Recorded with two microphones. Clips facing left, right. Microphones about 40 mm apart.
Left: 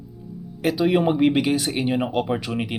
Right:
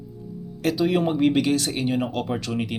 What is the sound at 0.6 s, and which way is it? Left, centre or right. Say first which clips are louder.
Speech: left 2 dB; centre.